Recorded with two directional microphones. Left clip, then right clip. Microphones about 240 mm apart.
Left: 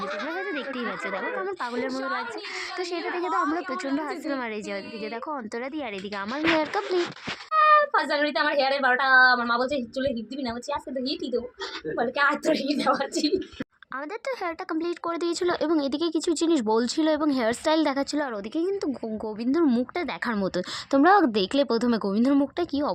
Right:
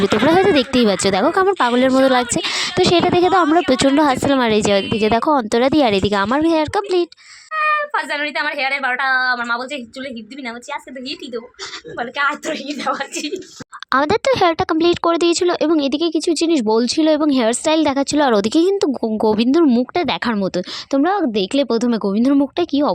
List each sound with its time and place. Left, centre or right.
0.2 s a woman's voice: right
7.5 s a sound: right
8.6 s speech: right
12.1 s a woman's voice: centre
13.9 s a woman's voice: right
21.1 s a woman's voice: centre
21.4 s speech: right